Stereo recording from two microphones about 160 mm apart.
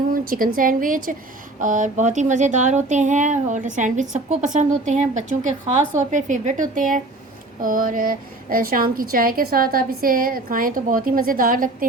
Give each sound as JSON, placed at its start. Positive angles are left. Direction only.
{"t": 0.1, "sound": "a woman's voice", "side_deg": -60}